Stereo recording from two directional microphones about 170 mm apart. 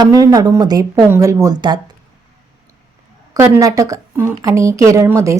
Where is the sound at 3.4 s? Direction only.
15° right (ahead or behind).